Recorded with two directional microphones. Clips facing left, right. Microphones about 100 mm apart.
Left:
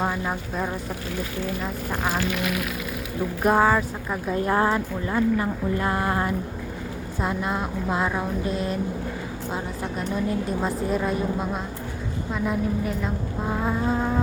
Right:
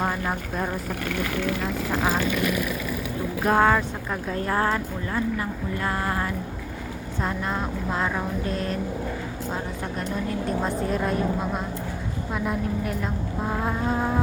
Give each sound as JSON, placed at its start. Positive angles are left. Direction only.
{"t": 0.3, "sound": "speech", "side_deg": 0}
{"t": 1.0, "sound": "speech", "side_deg": -65}
{"t": 3.4, "sound": "speech", "side_deg": 5}
{"t": 4.4, "sound": "speech", "side_deg": 20}
{"t": 7.2, "sound": "speech", "side_deg": 10}
{"t": 10.6, "sound": "speech", "side_deg": 5}